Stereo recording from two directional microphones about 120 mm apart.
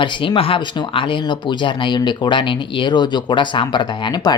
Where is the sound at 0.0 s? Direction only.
40° left (ahead or behind).